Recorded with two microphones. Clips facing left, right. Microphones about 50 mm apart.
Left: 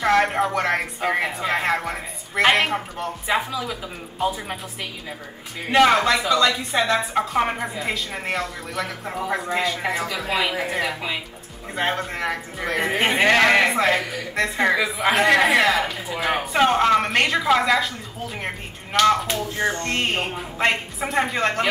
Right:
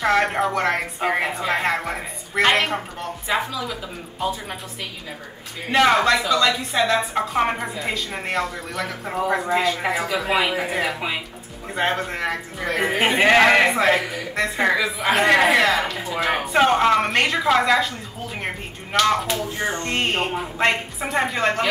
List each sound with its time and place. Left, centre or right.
0.0 s speech: centre
5.7 s speech: centre
18.9 s speech: centre